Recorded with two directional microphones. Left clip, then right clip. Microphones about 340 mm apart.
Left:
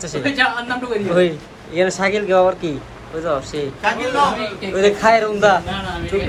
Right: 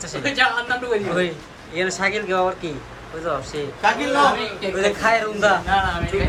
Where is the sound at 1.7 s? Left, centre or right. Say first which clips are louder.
Left 4 dB; centre.